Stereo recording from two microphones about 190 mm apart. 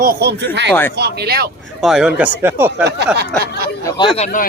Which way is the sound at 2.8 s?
60° right (ahead or behind).